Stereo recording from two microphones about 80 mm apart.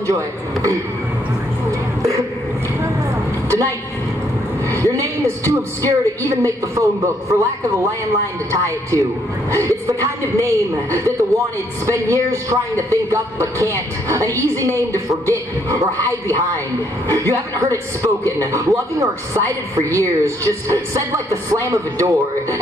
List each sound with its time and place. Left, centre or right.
0.0 s a man's voice: right
1.7 s a sound: right
4.6 s a woman's voice: right